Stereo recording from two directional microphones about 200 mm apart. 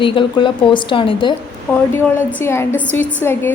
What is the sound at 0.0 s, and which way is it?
Speech, 25° left (ahead or behind).